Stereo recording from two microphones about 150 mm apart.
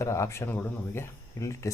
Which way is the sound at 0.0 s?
20° left (ahead or behind).